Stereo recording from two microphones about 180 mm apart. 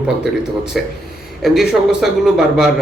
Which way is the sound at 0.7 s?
Centre (ahead or behind).